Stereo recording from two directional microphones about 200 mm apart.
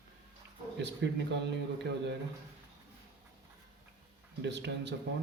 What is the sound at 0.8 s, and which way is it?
Speech, 60° right (ahead or behind).